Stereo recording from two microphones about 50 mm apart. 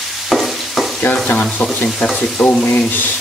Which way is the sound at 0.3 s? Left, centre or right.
Centre.